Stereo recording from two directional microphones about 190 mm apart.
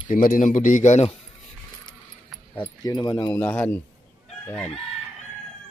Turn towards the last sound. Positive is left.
turn(degrees=10)  # may be behind; listen again after turning